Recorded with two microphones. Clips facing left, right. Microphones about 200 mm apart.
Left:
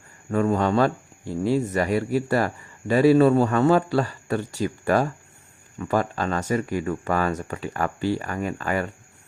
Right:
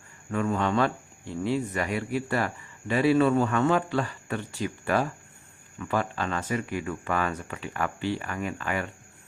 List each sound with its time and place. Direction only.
0.3 s speech: 40° left (ahead or behind)